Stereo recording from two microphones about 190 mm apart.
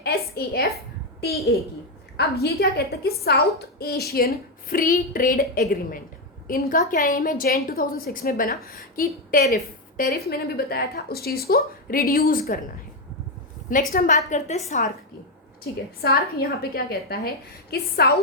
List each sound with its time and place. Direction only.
0.0 s a woman's voice: 55° left (ahead or behind)
13.7 s a woman's voice: 45° left (ahead or behind)
16.0 s a woman's voice: 55° left (ahead or behind)